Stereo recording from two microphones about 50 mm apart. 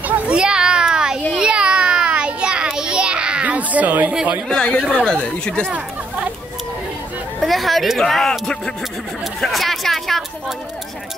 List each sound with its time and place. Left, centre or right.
0.3 s a sound: centre
1.3 s child singing: centre
3.4 s a sound: right
4.1 s speech: centre
4.5 s speech: centre
5.7 s chatter: right
7.3 s speech: centre